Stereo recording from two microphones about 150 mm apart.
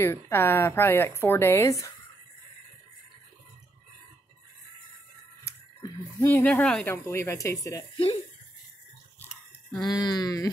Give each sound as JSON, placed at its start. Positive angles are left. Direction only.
{"t": 0.0, "sound": "a woman's voice", "side_deg": 15}
{"t": 5.4, "sound": "speech", "side_deg": 20}
{"t": 7.9, "sound": "speech", "side_deg": 40}
{"t": 9.7, "sound": "speech", "side_deg": 30}